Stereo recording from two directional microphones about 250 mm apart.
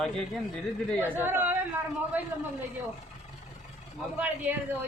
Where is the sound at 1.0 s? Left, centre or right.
Centre.